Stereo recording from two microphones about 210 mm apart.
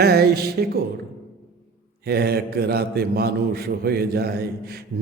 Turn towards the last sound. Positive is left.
turn(degrees=-50)  # may be behind; listen again after turning